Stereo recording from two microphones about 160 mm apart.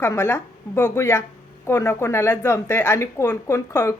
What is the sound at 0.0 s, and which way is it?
Speech, 15° left (ahead or behind).